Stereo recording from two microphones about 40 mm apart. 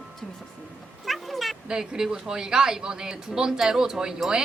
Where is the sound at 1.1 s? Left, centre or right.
Centre.